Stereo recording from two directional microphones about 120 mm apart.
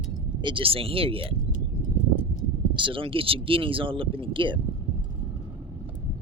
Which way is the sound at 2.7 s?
45° right (ahead or behind).